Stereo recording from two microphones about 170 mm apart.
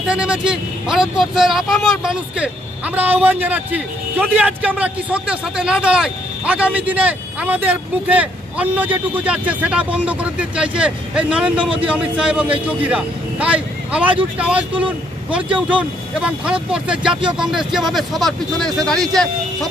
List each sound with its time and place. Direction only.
0.0 s speech: 5° right (ahead or behind)
15.4 s speech: 30° right (ahead or behind)
16.2 s speech: 5° right (ahead or behind)
17.1 s speech: 30° right (ahead or behind)
17.4 s speech: 5° right (ahead or behind)